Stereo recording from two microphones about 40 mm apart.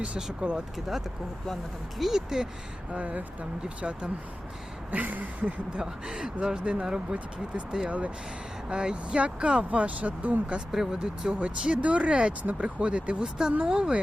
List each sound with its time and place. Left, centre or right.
0.4 s speech: right
2.0 s speech: centre
3.0 s a man's voice: right
4.9 s speech: right
5.8 s a man's voice: centre
7.9 s speech: right
8.7 s a man's voice: right
10.7 s speech: centre
11.3 s a man's voice: right
13.6 s a man's voice: centre